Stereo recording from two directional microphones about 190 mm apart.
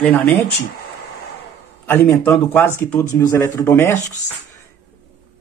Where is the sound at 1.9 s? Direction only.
10° left (ahead or behind).